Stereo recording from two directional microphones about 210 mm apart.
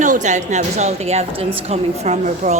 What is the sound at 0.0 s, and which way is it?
A woman's voice, 35° right (ahead or behind).